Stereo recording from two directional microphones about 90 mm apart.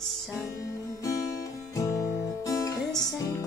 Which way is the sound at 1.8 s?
35° left (ahead or behind).